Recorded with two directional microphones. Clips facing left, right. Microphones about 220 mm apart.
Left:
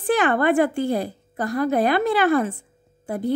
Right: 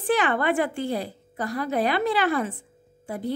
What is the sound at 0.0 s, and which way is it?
A woman's voice, 45° left (ahead or behind).